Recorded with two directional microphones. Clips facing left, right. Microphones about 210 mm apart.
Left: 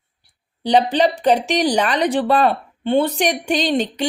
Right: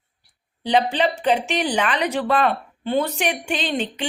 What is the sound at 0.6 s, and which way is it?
Speech, 35° left (ahead or behind).